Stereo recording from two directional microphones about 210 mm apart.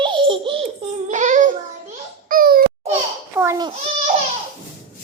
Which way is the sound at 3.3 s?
15° right (ahead or behind).